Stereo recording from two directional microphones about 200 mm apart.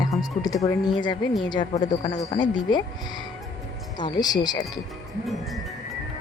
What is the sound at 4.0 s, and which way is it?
Speech, 20° left (ahead or behind).